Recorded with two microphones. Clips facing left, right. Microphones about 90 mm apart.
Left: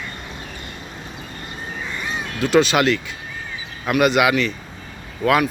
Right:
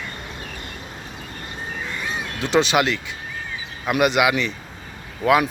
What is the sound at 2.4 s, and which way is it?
Speech, 20° right (ahead or behind).